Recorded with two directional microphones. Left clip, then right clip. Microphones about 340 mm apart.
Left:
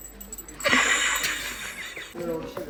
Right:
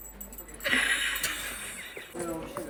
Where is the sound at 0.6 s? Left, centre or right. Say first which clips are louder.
Left 5 dB; centre.